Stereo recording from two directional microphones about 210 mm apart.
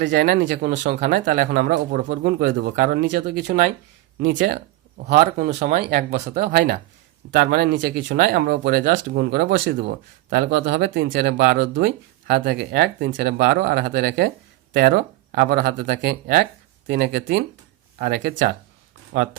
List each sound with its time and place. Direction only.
0.1 s speech: 45° right (ahead or behind)
5.0 s speech: 40° right (ahead or behind)